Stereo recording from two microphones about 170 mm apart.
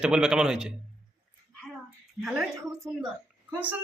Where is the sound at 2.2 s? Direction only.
Centre (ahead or behind).